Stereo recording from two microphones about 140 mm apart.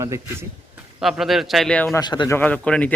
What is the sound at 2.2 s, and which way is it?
Speech, 15° left (ahead or behind).